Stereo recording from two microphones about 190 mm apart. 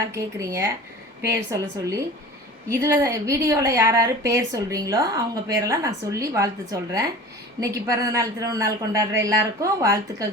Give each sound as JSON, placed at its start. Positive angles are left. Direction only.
{"t": 0.1, "sound": "a woman's voice", "side_deg": -15}
{"t": 2.6, "sound": "a woman's voice", "side_deg": -15}